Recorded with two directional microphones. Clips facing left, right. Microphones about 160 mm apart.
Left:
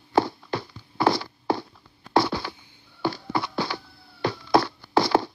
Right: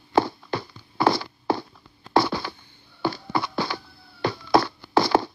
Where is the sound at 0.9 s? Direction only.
60° right (ahead or behind).